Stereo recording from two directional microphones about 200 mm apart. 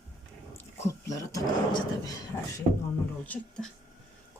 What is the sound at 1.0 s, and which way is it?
Speech, 15° left (ahead or behind).